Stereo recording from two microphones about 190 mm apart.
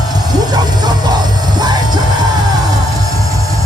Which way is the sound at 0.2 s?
20° right (ahead or behind).